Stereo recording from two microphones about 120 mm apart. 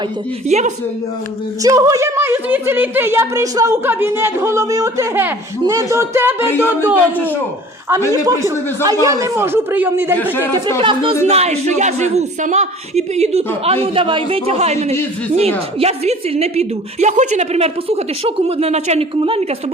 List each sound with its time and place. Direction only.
0.4 s speech: 70° right (ahead or behind)
1.6 s speech: 25° right (ahead or behind)
3.8 s speech: 20° right (ahead or behind)
6.5 s speech: 20° left (ahead or behind)
8.1 s speech: 30° right (ahead or behind)
10.8 s speech: 45° right (ahead or behind)
11.3 s a woman's voice: 60° right (ahead or behind)
13.8 s a woman's voice: 50° right (ahead or behind)